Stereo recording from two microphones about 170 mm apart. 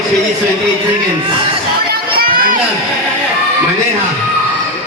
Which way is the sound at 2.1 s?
60° right (ahead or behind).